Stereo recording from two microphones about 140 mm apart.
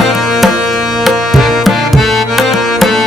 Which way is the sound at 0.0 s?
Centre (ahead or behind).